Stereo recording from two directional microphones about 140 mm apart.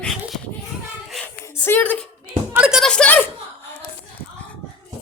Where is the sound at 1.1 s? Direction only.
15° left (ahead or behind).